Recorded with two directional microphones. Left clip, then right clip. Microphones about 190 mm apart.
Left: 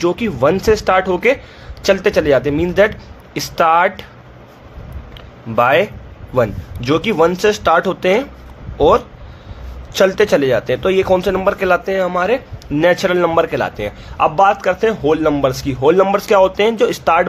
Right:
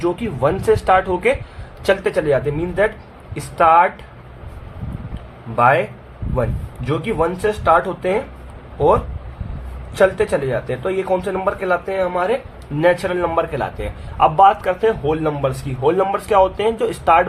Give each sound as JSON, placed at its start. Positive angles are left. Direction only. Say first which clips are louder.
{"t": 0.0, "sound": "a man's voice", "louder": "left 4 dB", "side_deg": 35}
{"t": 5.5, "sound": "a man's voice", "louder": "left 2 dB", "side_deg": 50}
{"t": 9.9, "sound": "a man's voice", "louder": "left 3 dB", "side_deg": 45}